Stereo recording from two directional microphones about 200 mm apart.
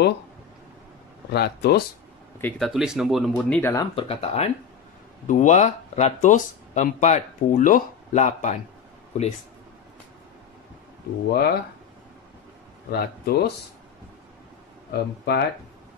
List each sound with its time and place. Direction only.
1.3 s speech: 55° left (ahead or behind)
2.4 s speech: centre (ahead or behind)
3.7 s speech: 30° left (ahead or behind)
11.2 s speech: 50° left (ahead or behind)
12.9 s speech: 50° left (ahead or behind)
14.9 s speech: 55° left (ahead or behind)